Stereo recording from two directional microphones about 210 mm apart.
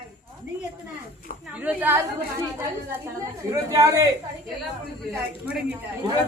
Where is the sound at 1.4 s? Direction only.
5° right (ahead or behind).